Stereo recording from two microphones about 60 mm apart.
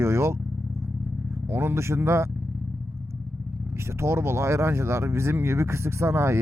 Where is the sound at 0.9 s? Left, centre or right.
Right.